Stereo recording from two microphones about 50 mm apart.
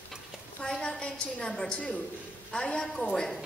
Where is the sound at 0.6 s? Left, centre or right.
Centre.